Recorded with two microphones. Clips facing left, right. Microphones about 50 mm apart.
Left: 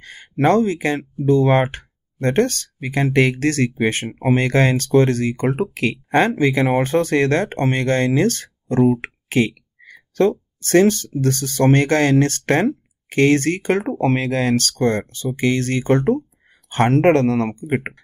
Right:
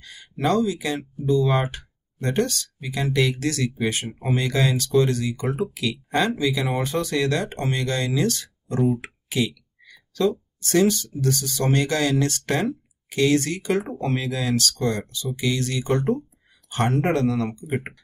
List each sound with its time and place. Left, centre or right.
0.0 s speech: left